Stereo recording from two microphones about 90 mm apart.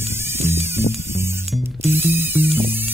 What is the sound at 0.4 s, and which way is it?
Music, 25° right (ahead or behind).